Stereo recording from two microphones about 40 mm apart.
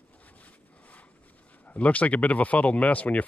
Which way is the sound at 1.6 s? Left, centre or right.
Left.